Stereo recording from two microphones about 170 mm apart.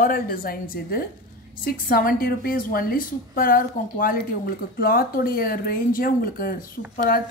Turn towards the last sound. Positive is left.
turn(degrees=50)  # may be behind; listen again after turning